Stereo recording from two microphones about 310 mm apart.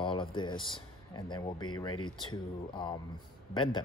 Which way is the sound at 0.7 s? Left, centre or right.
Centre.